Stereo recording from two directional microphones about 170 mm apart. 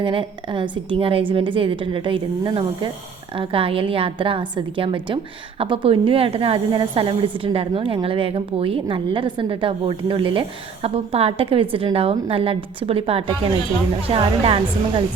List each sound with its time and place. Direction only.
0.0 s a woman's voice: 30° right (ahead or behind)